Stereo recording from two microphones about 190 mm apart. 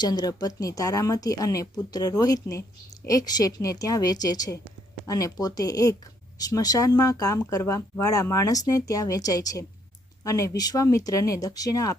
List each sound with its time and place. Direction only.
0.0 s speech: 20° left (ahead or behind)